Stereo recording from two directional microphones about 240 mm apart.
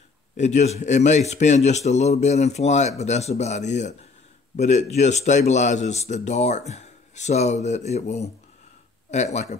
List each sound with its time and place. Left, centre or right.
0.4 s speech: left